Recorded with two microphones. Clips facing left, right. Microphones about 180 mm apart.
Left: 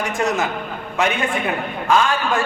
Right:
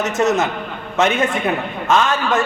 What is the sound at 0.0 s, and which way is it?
Speech, 20° right (ahead or behind).